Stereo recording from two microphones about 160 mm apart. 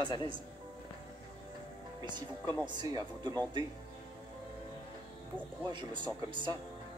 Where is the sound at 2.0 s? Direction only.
25° right (ahead or behind).